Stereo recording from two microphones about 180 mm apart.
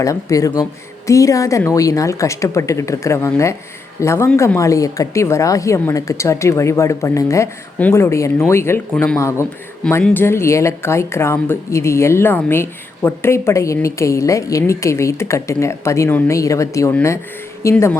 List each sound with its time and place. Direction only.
0.0 s speech: 20° left (ahead or behind)